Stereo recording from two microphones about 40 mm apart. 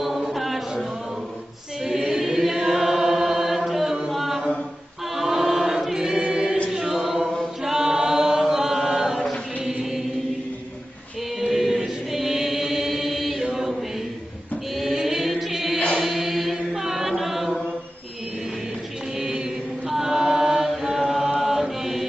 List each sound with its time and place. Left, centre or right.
0.0 s a sound: centre
2.0 s chant: centre
5.1 s choir: centre
5.4 s choir: centre
6.7 s chant: right
8.8 s chant: right
11.4 s chant: centre
15.0 s chant: centre
15.2 s music: centre
16.0 s chant: centre
19.1 s mantra: centre
19.9 s chant: centre